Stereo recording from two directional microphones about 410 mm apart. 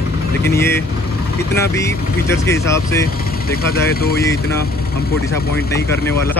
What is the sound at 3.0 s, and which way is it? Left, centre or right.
Speech, left.